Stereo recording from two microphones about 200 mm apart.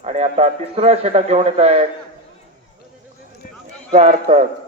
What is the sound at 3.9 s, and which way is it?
Speech, 35° right (ahead or behind).